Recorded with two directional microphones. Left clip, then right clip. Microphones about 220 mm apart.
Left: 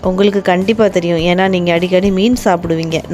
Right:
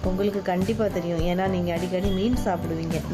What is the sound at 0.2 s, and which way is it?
A woman's voice, 40° left (ahead or behind).